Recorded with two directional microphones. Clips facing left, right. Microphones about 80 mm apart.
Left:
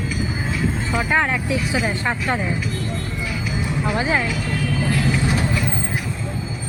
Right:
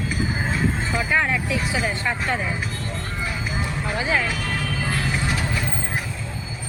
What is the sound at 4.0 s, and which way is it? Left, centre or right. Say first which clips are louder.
Speech: left 1 dB; left.